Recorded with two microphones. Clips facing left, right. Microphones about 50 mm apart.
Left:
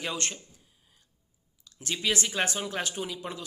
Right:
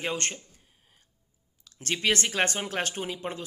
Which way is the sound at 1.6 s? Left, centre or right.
Right.